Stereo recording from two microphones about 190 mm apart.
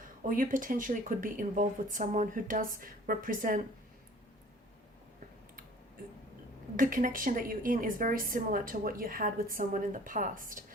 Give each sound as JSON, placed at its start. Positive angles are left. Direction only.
{"t": 0.2, "sound": "a woman's voice", "side_deg": -45}
{"t": 6.7, "sound": "a woman's voice", "side_deg": -45}